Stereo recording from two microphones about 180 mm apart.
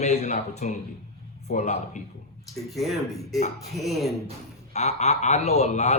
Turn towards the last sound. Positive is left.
turn(degrees=35)  # may be behind; listen again after turning